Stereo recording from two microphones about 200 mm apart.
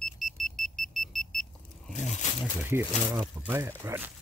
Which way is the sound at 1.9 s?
35° left (ahead or behind).